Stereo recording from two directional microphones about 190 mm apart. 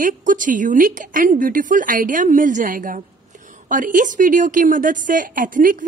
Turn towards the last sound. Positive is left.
turn(degrees=-45)  # may be behind; listen again after turning